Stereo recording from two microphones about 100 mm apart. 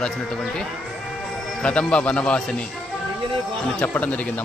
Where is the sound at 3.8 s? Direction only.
15° left (ahead or behind).